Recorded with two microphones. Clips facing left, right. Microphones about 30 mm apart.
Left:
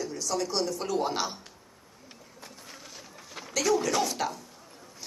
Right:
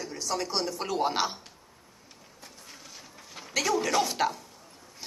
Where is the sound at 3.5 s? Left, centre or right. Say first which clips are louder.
Even; centre.